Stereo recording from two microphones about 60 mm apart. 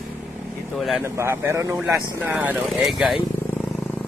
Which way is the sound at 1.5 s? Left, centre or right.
Right.